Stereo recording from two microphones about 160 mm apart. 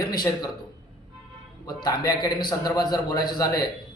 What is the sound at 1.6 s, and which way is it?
A man's voice, 25° left (ahead or behind).